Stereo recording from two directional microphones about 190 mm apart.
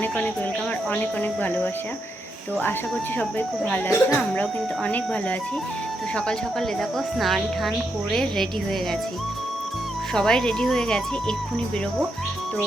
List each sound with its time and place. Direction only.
0.9 s speech: 10° left (ahead or behind)
3.2 s speech: 10° left (ahead or behind)
10.2 s speech: 5° left (ahead or behind)